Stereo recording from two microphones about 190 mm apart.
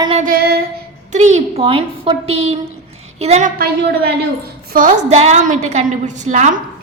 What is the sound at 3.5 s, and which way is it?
Speech, 55° right (ahead or behind).